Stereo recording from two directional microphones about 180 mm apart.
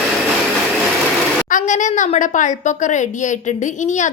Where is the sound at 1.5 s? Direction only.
45° left (ahead or behind).